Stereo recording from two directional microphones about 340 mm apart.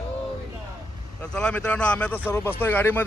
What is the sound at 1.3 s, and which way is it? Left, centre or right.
Speech, centre.